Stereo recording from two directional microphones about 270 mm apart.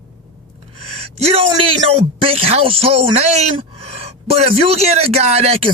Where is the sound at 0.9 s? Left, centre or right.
Right.